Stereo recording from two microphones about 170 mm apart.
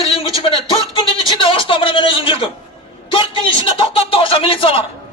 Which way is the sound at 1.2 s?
30° left (ahead or behind).